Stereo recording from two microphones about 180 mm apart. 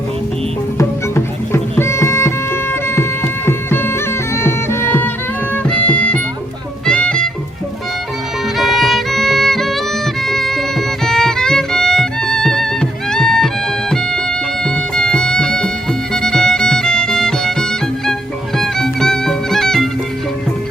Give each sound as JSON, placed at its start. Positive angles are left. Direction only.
{"t": 0.8, "sound": "music", "side_deg": 15}
{"t": 8.5, "sound": "music", "side_deg": 0}
{"t": 14.6, "sound": "music", "side_deg": 5}